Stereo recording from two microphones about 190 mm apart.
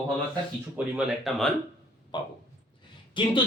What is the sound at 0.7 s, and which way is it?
Speech, centre (ahead or behind).